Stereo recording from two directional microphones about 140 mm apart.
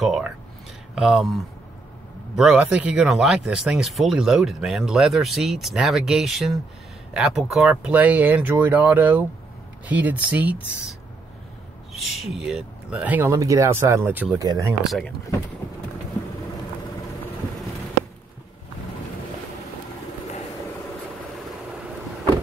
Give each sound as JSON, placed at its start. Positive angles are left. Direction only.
{"t": 0.0, "sound": "speech", "side_deg": 0}
{"t": 13.3, "sound": "speech", "side_deg": -25}
{"t": 14.8, "sound": "speech", "side_deg": 0}